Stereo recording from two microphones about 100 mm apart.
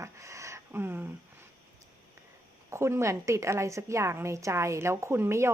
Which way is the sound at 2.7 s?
25° right (ahead or behind).